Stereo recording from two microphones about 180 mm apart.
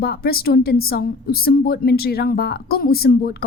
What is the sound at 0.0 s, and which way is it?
A woman's voice, 60° left (ahead or behind).